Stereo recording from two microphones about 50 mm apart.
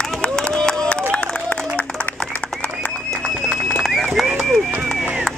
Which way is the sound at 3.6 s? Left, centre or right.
Centre.